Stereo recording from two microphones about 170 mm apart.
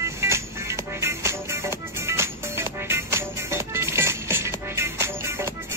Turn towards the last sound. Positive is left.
turn(degrees=-15)  # may be behind; listen again after turning